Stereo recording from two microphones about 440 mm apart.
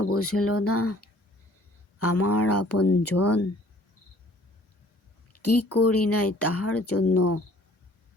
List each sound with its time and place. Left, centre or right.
0.0 s speech: left
5.3 s speech: left